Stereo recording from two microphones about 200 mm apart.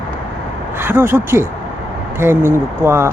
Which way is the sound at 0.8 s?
10° right (ahead or behind).